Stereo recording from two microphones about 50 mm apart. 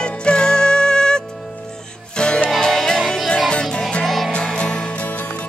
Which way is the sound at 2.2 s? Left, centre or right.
Centre.